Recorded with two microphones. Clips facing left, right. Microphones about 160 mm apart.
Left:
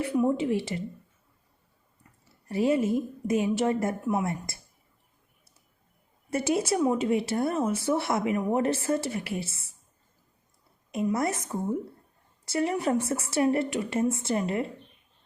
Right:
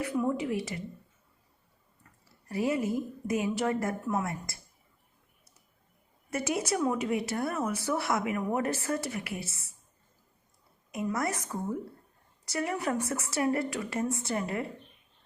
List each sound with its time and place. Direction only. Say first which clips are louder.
0.0 s a woman's voice: left 4 dB; 25° left (ahead or behind)
2.5 s a woman's voice: left 5 dB; 25° left (ahead or behind)
6.3 s a woman's voice: left 4 dB; 30° left (ahead or behind)
10.9 s a woman's voice: left 4 dB; 25° left (ahead or behind)